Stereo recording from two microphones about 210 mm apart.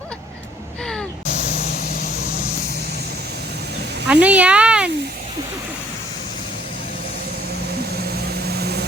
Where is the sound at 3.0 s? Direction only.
50° right (ahead or behind).